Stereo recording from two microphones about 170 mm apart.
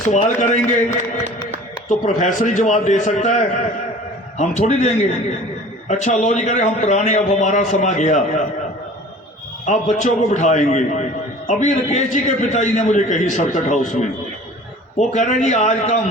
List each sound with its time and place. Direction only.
0.3 s a man's voice: 45° left (ahead or behind)
1.9 s a man's voice: 45° left (ahead or behind)
9.6 s a man's voice: 45° left (ahead or behind)